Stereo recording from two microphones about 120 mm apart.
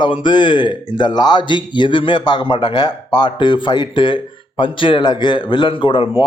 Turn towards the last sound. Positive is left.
turn(degrees=40)  # may be behind; listen again after turning